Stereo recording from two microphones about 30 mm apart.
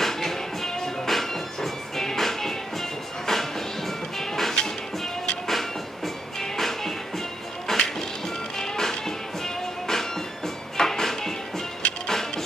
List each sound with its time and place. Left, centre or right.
0.0 s music: centre